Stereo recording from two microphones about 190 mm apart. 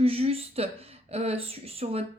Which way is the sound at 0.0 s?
30° right (ahead or behind).